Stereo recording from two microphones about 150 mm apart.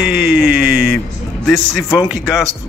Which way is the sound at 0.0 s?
5° right (ahead or behind).